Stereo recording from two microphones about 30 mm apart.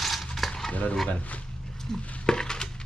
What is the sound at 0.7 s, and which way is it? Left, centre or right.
Speech, left.